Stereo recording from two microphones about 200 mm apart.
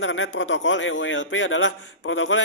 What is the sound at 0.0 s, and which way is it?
A man's voice, 70° left (ahead or behind).